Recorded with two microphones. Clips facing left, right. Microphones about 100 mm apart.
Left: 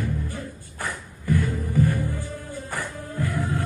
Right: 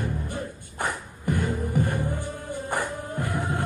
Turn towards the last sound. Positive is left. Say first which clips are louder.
# left 1 dB
turn(degrees=-20)  # may be behind; listen again after turning